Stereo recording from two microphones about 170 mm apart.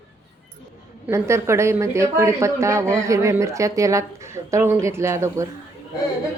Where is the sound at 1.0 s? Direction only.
15° right (ahead or behind).